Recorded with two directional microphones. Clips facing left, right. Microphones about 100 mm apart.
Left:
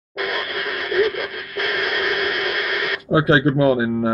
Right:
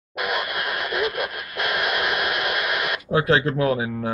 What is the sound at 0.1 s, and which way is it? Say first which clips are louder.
Radio: left 1 dB; 10° right (ahead or behind).